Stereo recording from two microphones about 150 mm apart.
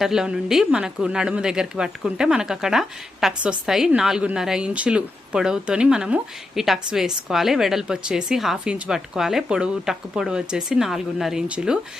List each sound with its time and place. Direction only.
0.0 s a woman's voice: 5° right (ahead or behind)